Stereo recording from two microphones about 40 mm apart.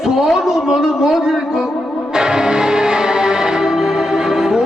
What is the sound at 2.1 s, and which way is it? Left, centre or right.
Music, centre.